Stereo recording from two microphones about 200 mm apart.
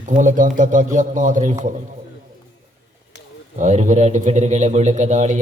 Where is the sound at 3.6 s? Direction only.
40° right (ahead or behind).